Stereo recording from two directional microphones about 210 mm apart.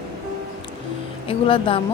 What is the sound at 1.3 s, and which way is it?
Speech, 25° left (ahead or behind).